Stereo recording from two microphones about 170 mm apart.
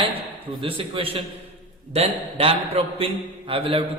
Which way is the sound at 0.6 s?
30° right (ahead or behind).